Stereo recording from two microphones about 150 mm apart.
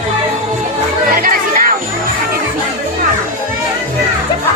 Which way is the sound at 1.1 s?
70° right (ahead or behind).